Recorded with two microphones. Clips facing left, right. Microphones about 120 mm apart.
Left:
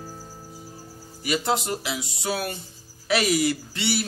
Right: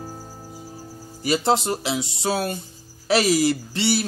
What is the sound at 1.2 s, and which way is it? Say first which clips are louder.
Speech: right 4 dB; 30° right (ahead or behind).